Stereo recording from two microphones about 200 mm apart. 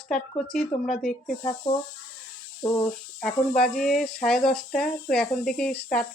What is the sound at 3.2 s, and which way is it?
Speech, 5° left (ahead or behind).